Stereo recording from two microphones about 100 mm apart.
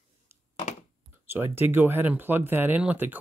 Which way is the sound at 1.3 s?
25° right (ahead or behind).